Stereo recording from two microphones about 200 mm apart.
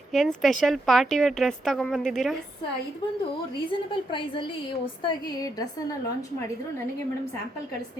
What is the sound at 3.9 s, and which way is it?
A woman's voice, 25° left (ahead or behind).